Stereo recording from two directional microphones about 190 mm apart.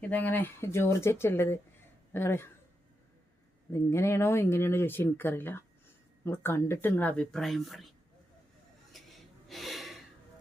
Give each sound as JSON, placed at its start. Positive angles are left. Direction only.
{"t": 0.0, "sound": "speech", "side_deg": 10}
{"t": 3.7, "sound": "speech", "side_deg": 15}
{"t": 8.9, "sound": "a sound", "side_deg": 0}
{"t": 9.5, "sound": "gasp", "side_deg": 0}